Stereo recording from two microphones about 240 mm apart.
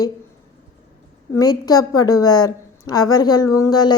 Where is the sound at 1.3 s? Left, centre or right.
Centre.